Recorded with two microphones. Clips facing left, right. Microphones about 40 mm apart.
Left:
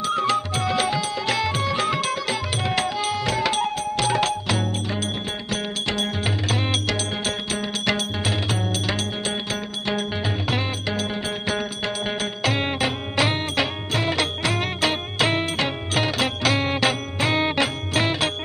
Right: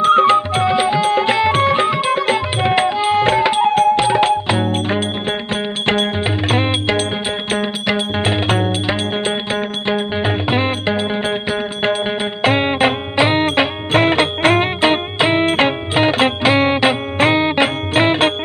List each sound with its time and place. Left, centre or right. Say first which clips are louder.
0.0 s music: right 11 dB; right
1.9 s tabla: right 8 dB; right
3.7 s music: right 13 dB; right
4.0 s music: right 8 dB; right
8.2 s music: right 8 dB; right
9.8 s music: right 6 dB; right
13.4 s music: right 8 dB; right
15.4 s music: right 10 dB; right